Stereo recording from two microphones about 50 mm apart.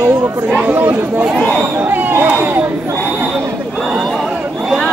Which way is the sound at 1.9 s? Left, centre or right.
Right.